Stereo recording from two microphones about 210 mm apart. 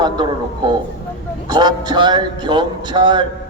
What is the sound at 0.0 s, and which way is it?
A woman's voice, 20° right (ahead or behind).